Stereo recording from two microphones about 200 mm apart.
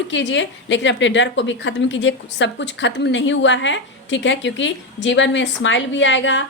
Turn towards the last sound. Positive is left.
turn(degrees=65)  # may be behind; listen again after turning